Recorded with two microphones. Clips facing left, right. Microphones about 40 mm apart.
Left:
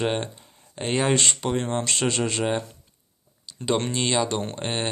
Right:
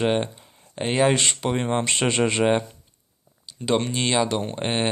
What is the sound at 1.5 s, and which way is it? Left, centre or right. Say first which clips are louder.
Speech: right 2 dB; right.